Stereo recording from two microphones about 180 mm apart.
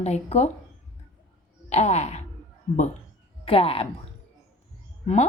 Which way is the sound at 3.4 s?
30° left (ahead or behind).